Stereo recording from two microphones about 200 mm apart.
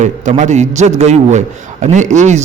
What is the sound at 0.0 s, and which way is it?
A man's voice, 40° right (ahead or behind).